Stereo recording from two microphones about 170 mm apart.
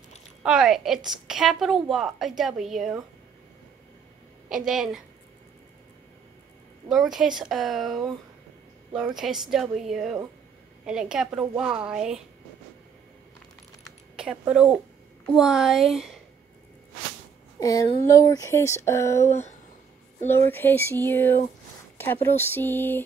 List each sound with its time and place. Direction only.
0.4 s a woman's voice: 5° right (ahead or behind)
4.5 s a woman's voice: 5° right (ahead or behind)
6.9 s a woman's voice: centre (ahead or behind)
13.8 s a sound: 5° right (ahead or behind)
15.2 s a woman's voice: centre (ahead or behind)
17.6 s speech: 20° left (ahead or behind)